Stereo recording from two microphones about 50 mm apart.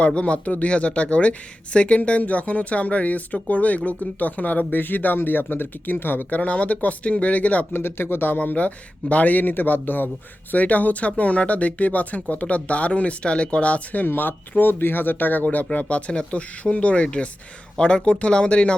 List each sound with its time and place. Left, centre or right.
0.0 s speech: left
6.4 s speech: left
7.7 s speech: left
14.1 s speech: left